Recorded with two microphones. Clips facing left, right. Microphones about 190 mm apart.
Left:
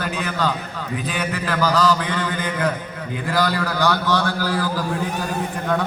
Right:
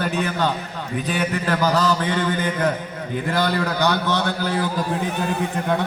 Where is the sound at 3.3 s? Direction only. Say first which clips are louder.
Left 1 dB; 25° right (ahead or behind).